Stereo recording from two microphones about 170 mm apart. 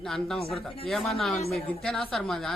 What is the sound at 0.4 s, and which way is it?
Speech, 35° left (ahead or behind).